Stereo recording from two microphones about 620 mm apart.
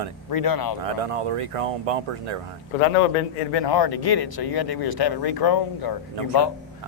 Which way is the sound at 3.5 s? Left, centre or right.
Left.